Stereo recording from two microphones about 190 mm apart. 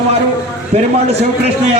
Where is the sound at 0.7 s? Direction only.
30° right (ahead or behind).